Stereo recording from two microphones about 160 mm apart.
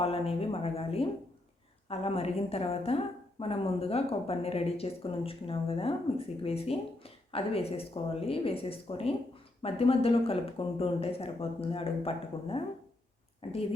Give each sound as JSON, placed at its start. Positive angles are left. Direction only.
{"t": 0.0, "sound": "a woman's voice", "side_deg": 40}